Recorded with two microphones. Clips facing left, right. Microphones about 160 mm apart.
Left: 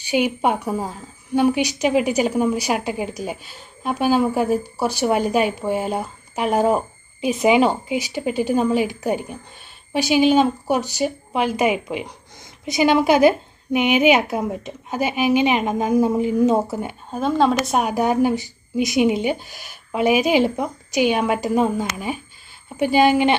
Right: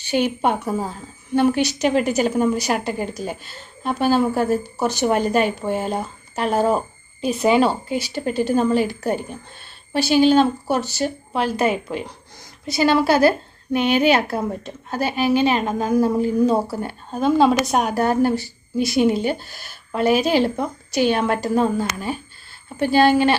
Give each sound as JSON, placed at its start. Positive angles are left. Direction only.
{"t": 0.1, "sound": "speech", "side_deg": 10}
{"t": 17.1, "sound": "a woman's voice", "side_deg": 0}
{"t": 17.9, "sound": "speech", "side_deg": 15}